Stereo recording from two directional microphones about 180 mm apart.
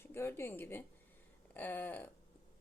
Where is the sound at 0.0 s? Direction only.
15° left (ahead or behind).